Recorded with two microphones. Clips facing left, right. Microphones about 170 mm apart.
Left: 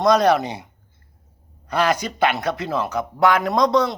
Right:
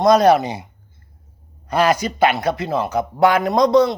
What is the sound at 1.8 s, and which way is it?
Speech, 5° right (ahead or behind).